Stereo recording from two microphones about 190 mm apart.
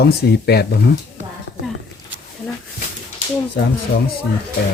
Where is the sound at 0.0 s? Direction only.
55° left (ahead or behind).